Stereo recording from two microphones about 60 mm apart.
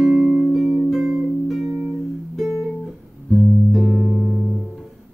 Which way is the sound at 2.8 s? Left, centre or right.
Centre.